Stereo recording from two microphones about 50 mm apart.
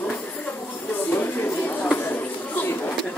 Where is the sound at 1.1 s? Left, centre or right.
Left.